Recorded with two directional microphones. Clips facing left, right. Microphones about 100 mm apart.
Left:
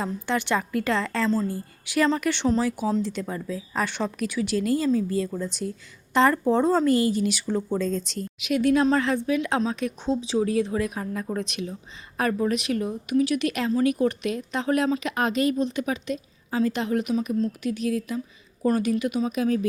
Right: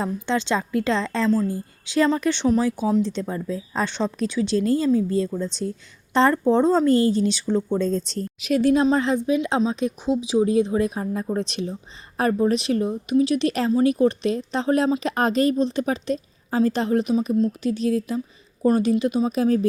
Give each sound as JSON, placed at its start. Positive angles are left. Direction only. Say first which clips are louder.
{"t": 0.0, "sound": "a woman's voice", "louder": "right 3 dB", "side_deg": -20}
{"t": 6.3, "sound": "a woman's voice", "louder": "right 3 dB", "side_deg": -15}
{"t": 7.4, "sound": "speech", "louder": "right 4 dB", "side_deg": -15}
{"t": 7.8, "sound": "a woman's voice", "louder": "right 3 dB", "side_deg": -30}